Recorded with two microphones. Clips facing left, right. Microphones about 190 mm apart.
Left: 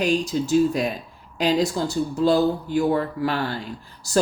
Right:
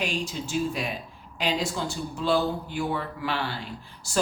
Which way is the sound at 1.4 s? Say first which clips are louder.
Left 7 dB; 40° left (ahead or behind).